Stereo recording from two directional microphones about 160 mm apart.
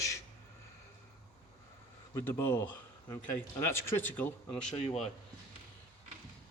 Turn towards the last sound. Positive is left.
turn(degrees=10)  # may be behind; listen again after turning